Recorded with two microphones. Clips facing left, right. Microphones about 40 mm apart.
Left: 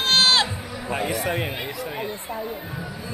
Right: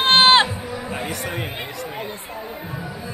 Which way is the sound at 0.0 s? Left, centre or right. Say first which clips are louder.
Right 5 dB; right.